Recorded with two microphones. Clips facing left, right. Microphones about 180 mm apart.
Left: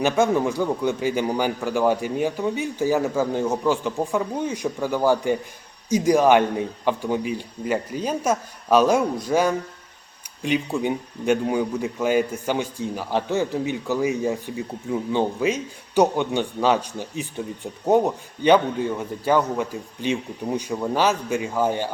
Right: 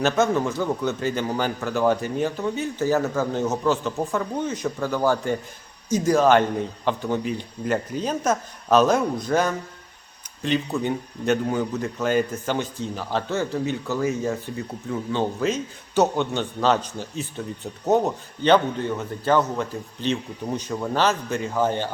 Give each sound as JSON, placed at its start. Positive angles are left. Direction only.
{"t": 0.0, "sound": "speech", "side_deg": 15}